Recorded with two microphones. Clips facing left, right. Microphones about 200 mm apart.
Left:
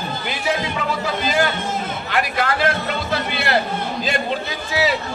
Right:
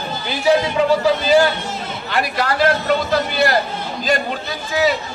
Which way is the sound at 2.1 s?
35° right (ahead or behind).